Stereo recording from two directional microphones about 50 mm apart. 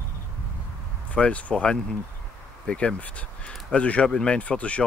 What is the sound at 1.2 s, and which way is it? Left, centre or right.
Speech, left.